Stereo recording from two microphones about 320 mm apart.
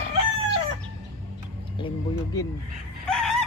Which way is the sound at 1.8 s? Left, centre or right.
Centre.